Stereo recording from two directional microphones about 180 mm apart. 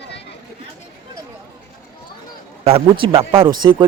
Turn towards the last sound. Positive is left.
turn(degrees=-25)  # may be behind; listen again after turning